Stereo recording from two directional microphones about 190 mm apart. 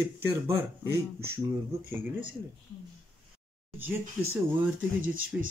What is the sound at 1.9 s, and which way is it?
Speech, 10° right (ahead or behind).